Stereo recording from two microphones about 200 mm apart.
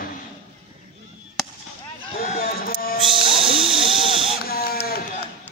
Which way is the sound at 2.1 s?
45° left (ahead or behind).